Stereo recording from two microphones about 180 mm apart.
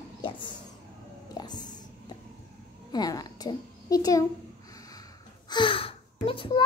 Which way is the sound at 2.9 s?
20° left (ahead or behind).